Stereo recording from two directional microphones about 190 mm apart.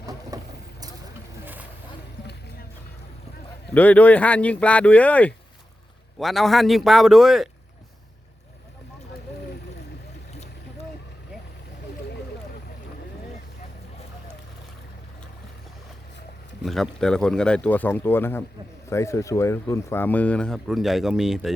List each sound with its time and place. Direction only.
0.0 s vehicle: 20° right (ahead or behind)
3.8 s speech: 10° left (ahead or behind)
16.6 s speech: centre (ahead or behind)